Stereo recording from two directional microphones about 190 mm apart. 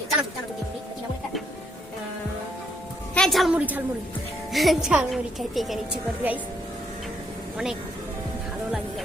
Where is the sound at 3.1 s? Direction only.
5° left (ahead or behind).